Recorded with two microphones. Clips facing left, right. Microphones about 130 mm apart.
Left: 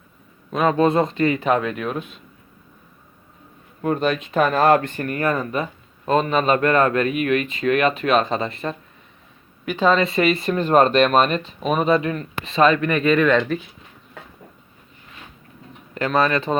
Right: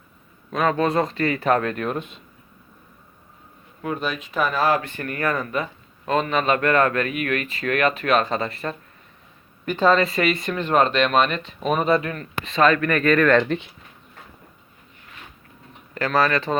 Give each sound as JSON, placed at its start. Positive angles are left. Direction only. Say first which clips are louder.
{"t": 0.5, "sound": "speech", "louder": "left 3 dB", "side_deg": 25}
{"t": 3.8, "sound": "speech", "louder": "left 6 dB", "side_deg": 50}
{"t": 5.0, "sound": "speech", "louder": "left 3 dB", "side_deg": 25}
{"t": 9.6, "sound": "speech", "louder": "even", "side_deg": 15}
{"t": 11.6, "sound": "speech", "louder": "even", "side_deg": 10}
{"t": 11.9, "sound": "speech", "louder": "left 2 dB", "side_deg": 25}
{"t": 16.0, "sound": "speech", "louder": "left 1 dB", "side_deg": 20}